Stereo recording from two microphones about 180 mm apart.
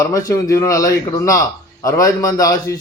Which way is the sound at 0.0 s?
20° left (ahead or behind).